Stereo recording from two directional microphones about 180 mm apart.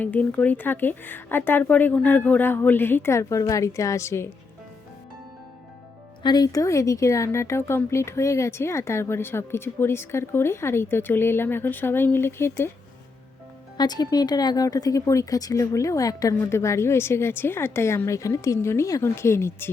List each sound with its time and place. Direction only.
0.0 s speech: 10° left (ahead or behind)
6.2 s speech: 20° left (ahead or behind)
13.7 s speech: 20° left (ahead or behind)